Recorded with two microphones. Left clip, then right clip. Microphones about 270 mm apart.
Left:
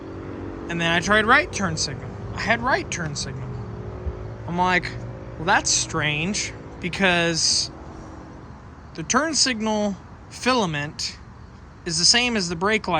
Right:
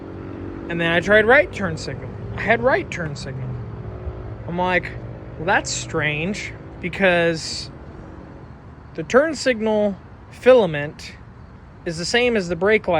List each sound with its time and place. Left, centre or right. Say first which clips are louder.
0.7 s speech: right 4 dB; centre
4.5 s speech: even; centre
9.0 s speech: right 4 dB; centre